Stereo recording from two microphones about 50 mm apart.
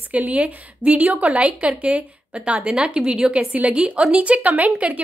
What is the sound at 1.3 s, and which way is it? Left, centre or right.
A woman's voice, centre.